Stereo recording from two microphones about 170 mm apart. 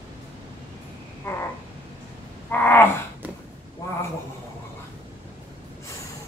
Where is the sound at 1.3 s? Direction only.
15° left (ahead or behind).